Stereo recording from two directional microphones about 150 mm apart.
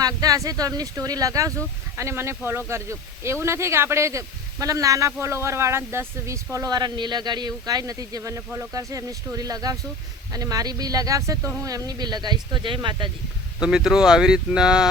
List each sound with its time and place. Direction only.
0.0 s speech: 25° right (ahead or behind)
13.6 s speech: 5° right (ahead or behind)